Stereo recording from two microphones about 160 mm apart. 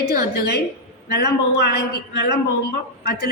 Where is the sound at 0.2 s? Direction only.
80° left.